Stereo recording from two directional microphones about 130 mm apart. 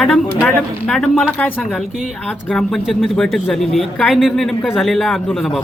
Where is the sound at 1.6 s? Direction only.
Centre (ahead or behind).